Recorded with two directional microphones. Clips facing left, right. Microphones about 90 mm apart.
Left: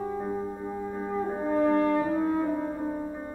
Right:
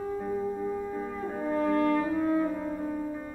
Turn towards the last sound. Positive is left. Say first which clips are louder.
# left 1 dB
turn(degrees=25)  # may be behind; listen again after turning